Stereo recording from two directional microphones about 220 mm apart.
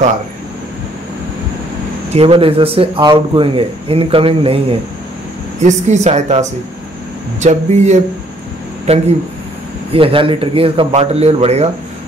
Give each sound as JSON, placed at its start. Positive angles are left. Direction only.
{"t": 2.1, "sound": "a man's voice", "side_deg": -25}